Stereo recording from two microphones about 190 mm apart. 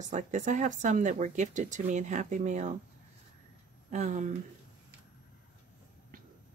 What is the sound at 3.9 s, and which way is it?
Speech, 40° right (ahead or behind).